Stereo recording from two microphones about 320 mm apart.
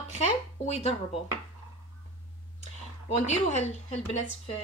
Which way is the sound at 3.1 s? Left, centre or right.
Left.